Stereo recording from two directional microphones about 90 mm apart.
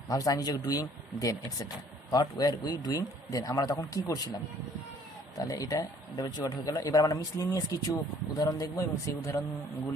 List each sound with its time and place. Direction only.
0.1 s speech: 40° left (ahead or behind)
5.4 s speech: 40° left (ahead or behind)